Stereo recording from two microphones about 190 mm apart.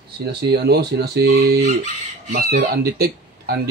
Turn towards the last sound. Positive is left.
turn(degrees=-55)  # may be behind; listen again after turning